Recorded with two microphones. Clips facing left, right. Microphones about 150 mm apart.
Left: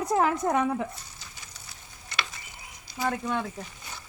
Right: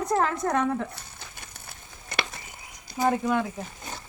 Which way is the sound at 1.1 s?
55° right (ahead or behind).